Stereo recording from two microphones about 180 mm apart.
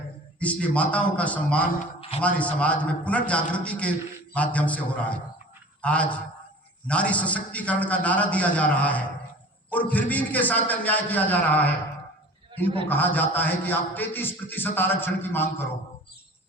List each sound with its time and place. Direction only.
0.3 s a man's voice: 5° left (ahead or behind)
1.8 s a sound: 30° left (ahead or behind)
2.2 s a man's voice: 5° left (ahead or behind)
12.9 s a man's voice: 10° left (ahead or behind)